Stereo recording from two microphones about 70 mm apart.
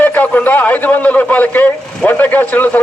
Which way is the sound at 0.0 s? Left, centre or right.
Left.